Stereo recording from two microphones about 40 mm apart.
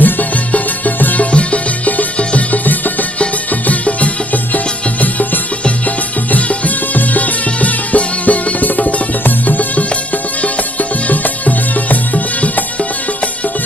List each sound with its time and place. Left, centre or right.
0.0 s music: left
1.2 s music: left
3.7 s music: left